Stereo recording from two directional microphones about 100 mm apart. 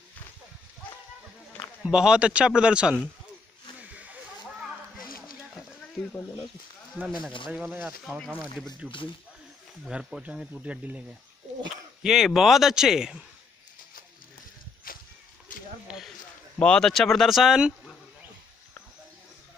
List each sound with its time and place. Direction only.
1.8 s speech: 5° right (ahead or behind)
3.9 s snake: 15° right (ahead or behind)
6.1 s speech: 10° left (ahead or behind)
7.5 s speech: 20° right (ahead or behind)
9.8 s speech: 5° right (ahead or behind)
11.7 s a sound: 5° right (ahead or behind)
12.4 s speech: 5° right (ahead or behind)
16.5 s speech: 10° left (ahead or behind)